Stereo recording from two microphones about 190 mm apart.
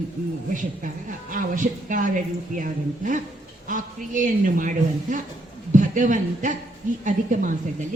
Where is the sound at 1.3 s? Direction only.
45° right (ahead or behind).